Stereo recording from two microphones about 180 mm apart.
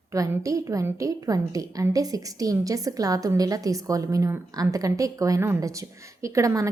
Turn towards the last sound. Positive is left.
turn(degrees=-15)  # may be behind; listen again after turning